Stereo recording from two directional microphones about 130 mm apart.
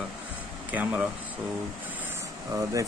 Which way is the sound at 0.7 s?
10° right (ahead or behind).